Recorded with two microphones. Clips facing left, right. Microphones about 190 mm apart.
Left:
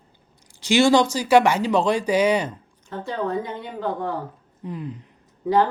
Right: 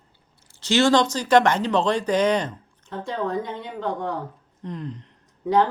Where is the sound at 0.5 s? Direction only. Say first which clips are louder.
Left 2 dB; 10° left (ahead or behind).